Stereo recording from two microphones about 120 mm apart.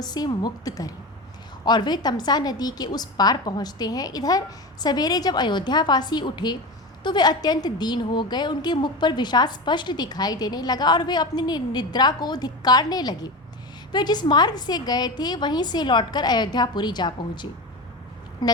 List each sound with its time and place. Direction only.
0.0 s a woman's voice: 35° left (ahead or behind)